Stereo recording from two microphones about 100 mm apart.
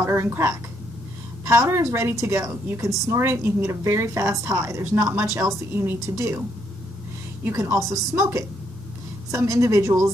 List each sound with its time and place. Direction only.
0.0 s a woman's voice: 25° right (ahead or behind)
7.4 s a woman's voice: 25° right (ahead or behind)